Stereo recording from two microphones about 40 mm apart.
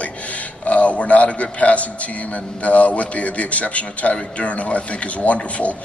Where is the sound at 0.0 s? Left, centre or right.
Left.